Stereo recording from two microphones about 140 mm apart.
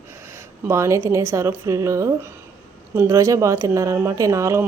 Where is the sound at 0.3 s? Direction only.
20° right (ahead or behind).